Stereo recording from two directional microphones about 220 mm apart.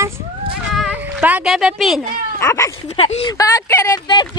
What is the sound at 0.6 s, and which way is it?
Music, 5° right (ahead or behind).